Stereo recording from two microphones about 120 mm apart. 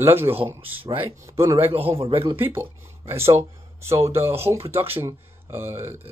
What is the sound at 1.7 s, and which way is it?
Speech, 50° right (ahead or behind).